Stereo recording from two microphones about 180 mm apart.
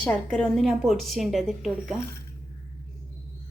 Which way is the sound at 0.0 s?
5° left (ahead or behind).